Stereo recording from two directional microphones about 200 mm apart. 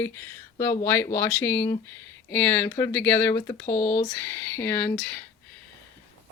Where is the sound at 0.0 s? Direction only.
10° left (ahead or behind).